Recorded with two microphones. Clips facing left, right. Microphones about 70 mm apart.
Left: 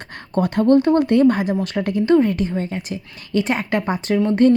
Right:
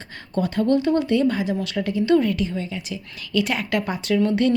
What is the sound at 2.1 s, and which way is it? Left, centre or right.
A woman's voice, left.